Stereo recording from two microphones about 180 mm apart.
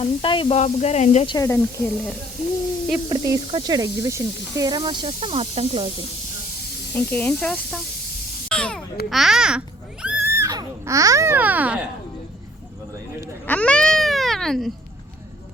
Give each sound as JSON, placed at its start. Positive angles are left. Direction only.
{"t": 0.0, "sound": "speech", "side_deg": 30}
{"t": 1.3, "sound": "speech", "side_deg": 15}
{"t": 3.1, "sound": "speech", "side_deg": -25}
{"t": 7.1, "sound": "speech", "side_deg": 10}
{"t": 8.4, "sound": "a sound", "side_deg": 5}
{"t": 9.0, "sound": "babbling", "side_deg": 0}
{"t": 13.5, "sound": "baby cry", "side_deg": 5}